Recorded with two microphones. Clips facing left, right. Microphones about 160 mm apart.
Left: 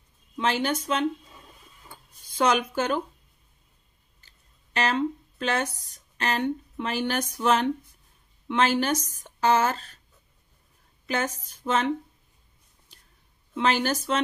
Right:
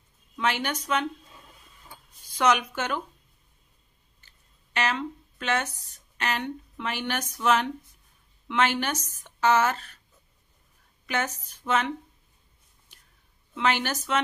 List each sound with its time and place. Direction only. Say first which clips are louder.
0.4 s a woman's voice: left 2 dB; 30° left (ahead or behind)
2.2 s a woman's voice: even; 30° left (ahead or behind)
4.7 s speech: left 3 dB; 35° left (ahead or behind)
11.1 s speech: left 1 dB; 30° left (ahead or behind)
13.6 s speech: left 2 dB; 35° left (ahead or behind)